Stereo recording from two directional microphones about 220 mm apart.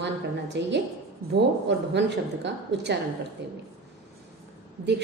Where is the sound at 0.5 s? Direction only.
50° right (ahead or behind).